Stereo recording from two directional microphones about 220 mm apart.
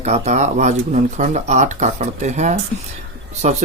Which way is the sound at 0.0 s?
30° right (ahead or behind).